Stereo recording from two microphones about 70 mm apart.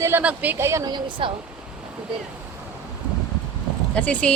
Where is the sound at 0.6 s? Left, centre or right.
Right.